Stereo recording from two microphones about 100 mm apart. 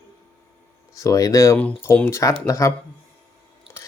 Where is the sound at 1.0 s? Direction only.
35° left (ahead or behind).